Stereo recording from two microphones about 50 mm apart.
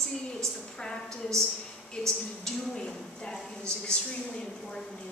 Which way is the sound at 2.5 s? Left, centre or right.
Centre.